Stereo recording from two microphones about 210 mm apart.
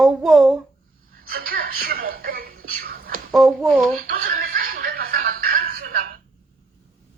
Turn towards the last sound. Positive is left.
turn(degrees=-45)  # may be behind; listen again after turning